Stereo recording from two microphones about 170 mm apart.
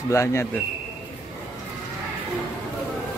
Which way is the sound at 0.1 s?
15° left (ahead or behind).